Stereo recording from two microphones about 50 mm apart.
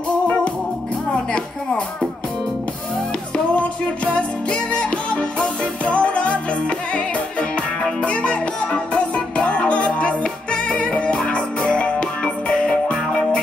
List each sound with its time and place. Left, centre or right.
1.3 s speech: left
3.5 s music: left